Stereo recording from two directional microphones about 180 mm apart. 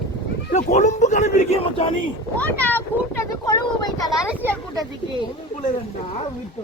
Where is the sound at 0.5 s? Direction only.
40° left (ahead or behind).